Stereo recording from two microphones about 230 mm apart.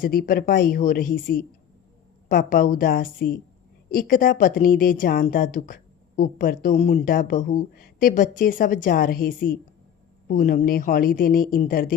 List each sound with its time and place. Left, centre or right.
0.0 s a woman's voice: left